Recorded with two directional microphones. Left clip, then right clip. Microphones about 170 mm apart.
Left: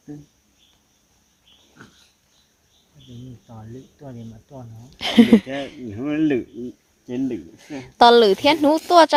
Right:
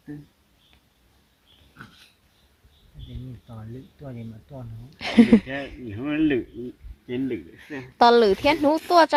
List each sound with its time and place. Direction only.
1.8 s dog: centre (ahead or behind)
4.0 s speech: centre (ahead or behind)
4.9 s speech: 15° left (ahead or behind)
5.9 s speech: 65° left (ahead or behind)
7.8 s speech: 15° left (ahead or behind)